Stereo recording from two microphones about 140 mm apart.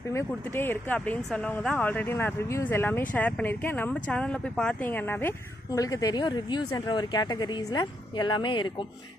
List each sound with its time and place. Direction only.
0.5 s speech: 15° left (ahead or behind)
5.7 s speech: 25° left (ahead or behind)